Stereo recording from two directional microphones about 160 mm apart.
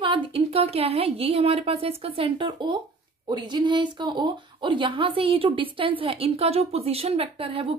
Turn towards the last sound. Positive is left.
turn(degrees=-35)  # may be behind; listen again after turning